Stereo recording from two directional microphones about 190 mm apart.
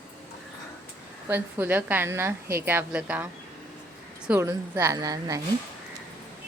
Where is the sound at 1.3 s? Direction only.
10° right (ahead or behind).